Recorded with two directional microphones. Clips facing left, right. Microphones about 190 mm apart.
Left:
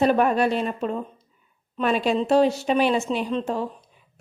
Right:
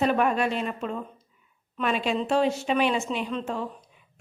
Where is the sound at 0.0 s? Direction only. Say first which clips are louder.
Left 4 dB; 40° left (ahead or behind).